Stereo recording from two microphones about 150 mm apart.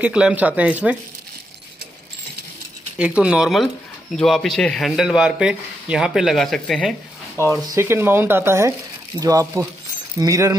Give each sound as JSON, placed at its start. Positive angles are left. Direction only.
{"t": 0.0, "sound": "speech", "side_deg": -10}
{"t": 3.0, "sound": "speech", "side_deg": -5}
{"t": 7.6, "sound": "speech", "side_deg": -20}